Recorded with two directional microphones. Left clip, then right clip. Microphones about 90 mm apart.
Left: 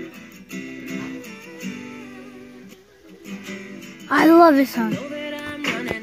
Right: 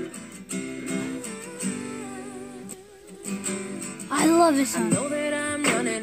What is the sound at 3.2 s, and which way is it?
Music, 35° right (ahead or behind).